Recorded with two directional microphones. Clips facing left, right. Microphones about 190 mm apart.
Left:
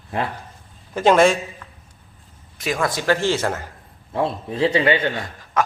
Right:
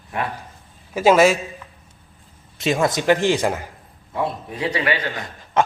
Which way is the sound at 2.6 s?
25° right (ahead or behind).